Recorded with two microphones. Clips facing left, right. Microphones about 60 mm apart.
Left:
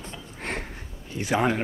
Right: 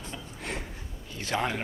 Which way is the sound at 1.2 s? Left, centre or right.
Centre.